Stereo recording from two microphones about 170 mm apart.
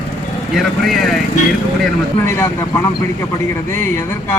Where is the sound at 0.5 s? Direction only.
Centre (ahead or behind).